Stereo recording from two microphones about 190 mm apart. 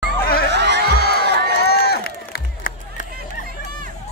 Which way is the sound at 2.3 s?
50° left (ahead or behind).